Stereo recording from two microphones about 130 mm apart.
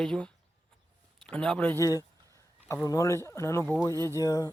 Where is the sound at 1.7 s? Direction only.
25° left (ahead or behind).